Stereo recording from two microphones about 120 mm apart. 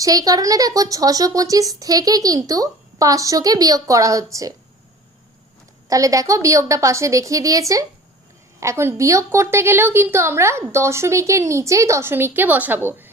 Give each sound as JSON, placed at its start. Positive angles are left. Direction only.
{"t": 0.0, "sound": "speech", "side_deg": -30}
{"t": 5.9, "sound": "speech", "side_deg": -30}